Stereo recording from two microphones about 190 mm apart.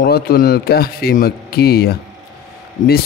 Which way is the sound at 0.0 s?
55° left (ahead or behind).